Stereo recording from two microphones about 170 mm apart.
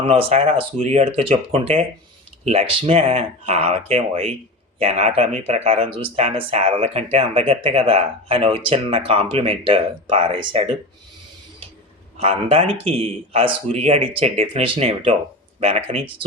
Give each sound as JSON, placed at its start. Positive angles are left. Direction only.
{"t": 0.1, "sound": "speech", "side_deg": -40}
{"t": 12.1, "sound": "speech", "side_deg": -35}